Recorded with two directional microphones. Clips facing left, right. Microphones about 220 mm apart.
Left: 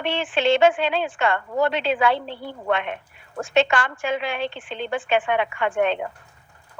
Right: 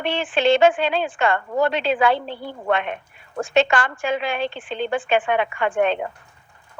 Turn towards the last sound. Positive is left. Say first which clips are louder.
# right 1 dB
turn(degrees=-40)  # may be behind; listen again after turning